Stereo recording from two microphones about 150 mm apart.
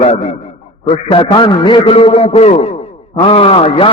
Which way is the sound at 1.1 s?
35° left (ahead or behind).